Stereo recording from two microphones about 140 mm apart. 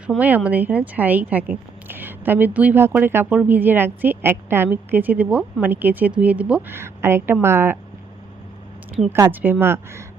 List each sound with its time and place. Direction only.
0.2 s speech: 10° right (ahead or behind)
9.1 s speech: 15° right (ahead or behind)